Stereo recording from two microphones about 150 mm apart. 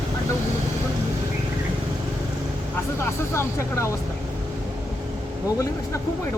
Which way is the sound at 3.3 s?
20° left (ahead or behind).